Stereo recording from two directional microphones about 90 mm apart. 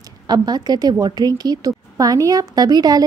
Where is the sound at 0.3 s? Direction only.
50° right (ahead or behind).